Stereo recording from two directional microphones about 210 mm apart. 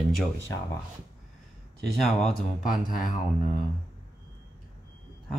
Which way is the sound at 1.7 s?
Centre (ahead or behind).